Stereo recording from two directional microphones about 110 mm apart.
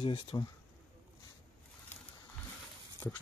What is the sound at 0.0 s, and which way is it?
Speech, 50° left (ahead or behind).